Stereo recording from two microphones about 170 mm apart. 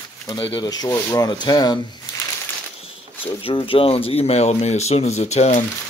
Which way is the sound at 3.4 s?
30° left (ahead or behind).